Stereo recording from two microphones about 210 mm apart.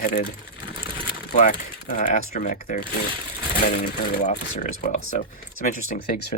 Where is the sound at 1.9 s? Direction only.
40° left (ahead or behind).